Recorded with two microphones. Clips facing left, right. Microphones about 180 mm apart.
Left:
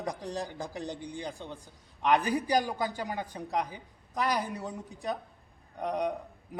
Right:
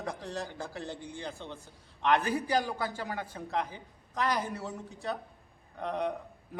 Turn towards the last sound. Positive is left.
turn(degrees=15)  # may be behind; listen again after turning